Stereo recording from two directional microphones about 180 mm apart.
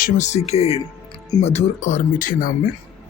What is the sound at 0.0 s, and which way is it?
Speech, 40° left (ahead or behind).